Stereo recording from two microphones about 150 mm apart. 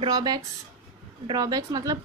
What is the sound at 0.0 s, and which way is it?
A woman's voice, 30° right (ahead or behind).